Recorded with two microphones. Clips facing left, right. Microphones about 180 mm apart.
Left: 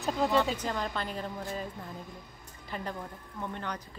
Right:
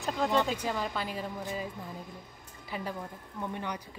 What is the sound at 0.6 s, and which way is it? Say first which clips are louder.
Speech: even; 5° right (ahead or behind).